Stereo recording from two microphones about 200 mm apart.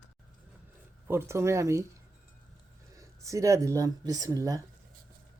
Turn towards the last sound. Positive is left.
turn(degrees=-15)  # may be behind; listen again after turning